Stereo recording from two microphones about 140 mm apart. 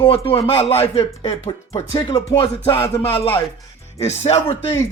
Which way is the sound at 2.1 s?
25° left (ahead or behind).